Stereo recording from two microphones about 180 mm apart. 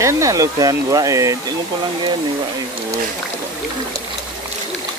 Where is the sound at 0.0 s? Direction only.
15° right (ahead or behind).